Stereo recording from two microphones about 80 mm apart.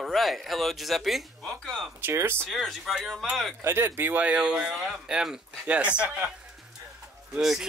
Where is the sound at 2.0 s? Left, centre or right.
Right.